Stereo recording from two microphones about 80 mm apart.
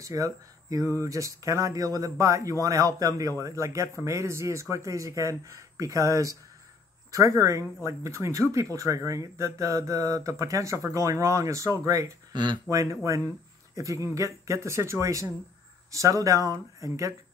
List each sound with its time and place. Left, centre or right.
0.0 s speech: right
12.3 s speech: right
12.6 s speech: right